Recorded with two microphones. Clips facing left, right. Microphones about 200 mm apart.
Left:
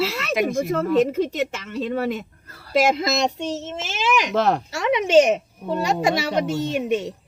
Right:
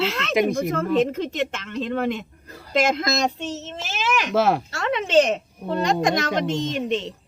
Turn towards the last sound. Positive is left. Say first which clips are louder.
# left 2 dB
turn(degrees=10)  # may be behind; listen again after turning